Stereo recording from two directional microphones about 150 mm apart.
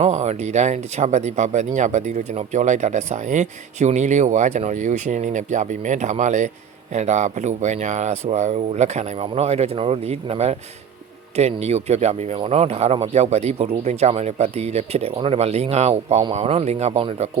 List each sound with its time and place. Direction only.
0.0 s speech: 50° right (ahead or behind)